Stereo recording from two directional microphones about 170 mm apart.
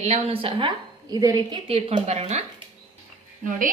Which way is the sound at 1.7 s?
35° right (ahead or behind).